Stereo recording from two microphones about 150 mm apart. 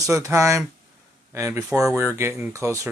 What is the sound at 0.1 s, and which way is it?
Speech, 20° right (ahead or behind).